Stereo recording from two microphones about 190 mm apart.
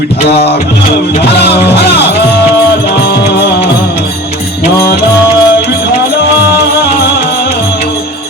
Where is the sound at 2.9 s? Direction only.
55° left (ahead or behind).